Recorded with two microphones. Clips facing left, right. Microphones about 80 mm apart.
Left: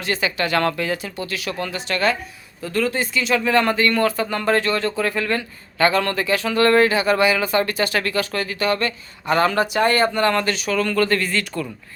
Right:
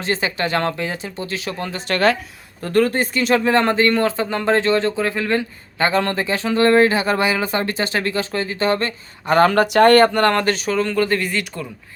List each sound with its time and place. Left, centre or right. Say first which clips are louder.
0.0 s speech: right 1 dB; right
1.9 s speech: right 4 dB; right
2.6 s speech: right 5 dB; right
10.8 s speech: left 3 dB; right